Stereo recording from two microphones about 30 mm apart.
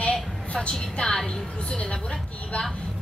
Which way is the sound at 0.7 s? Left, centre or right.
Centre.